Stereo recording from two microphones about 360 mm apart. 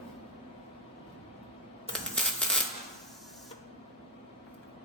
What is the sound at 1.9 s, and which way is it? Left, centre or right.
Coin, centre.